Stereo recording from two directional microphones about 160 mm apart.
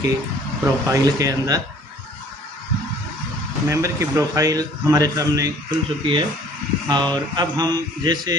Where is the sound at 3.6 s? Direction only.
20° right (ahead or behind).